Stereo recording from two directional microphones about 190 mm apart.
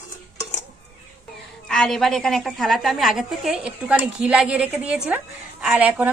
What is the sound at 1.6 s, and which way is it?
A woman's voice, 5° left (ahead or behind).